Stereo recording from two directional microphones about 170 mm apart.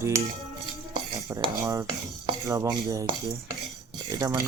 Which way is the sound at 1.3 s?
20° right (ahead or behind).